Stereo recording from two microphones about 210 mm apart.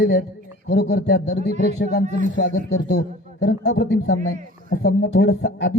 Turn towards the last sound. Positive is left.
turn(degrees=50)  # may be behind; listen again after turning